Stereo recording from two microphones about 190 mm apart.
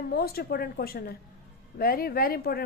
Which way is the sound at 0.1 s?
55° left (ahead or behind).